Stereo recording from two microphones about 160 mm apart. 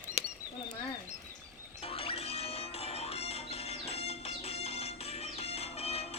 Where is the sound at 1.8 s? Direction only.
35° left (ahead or behind).